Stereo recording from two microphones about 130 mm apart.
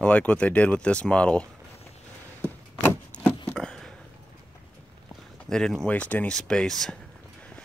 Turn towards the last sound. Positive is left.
turn(degrees=5)  # may be behind; listen again after turning